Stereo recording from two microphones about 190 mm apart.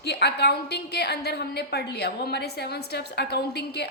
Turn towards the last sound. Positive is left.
turn(degrees=60)  # may be behind; listen again after turning